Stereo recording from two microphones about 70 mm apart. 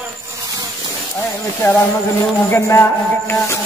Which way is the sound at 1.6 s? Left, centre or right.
Left.